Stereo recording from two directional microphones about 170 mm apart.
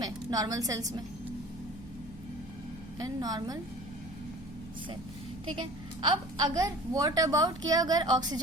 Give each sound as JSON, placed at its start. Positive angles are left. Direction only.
{"t": 0.0, "sound": "a woman's voice", "side_deg": -20}
{"t": 3.0, "sound": "a woman's voice", "side_deg": -25}
{"t": 5.5, "sound": "a woman's voice", "side_deg": -30}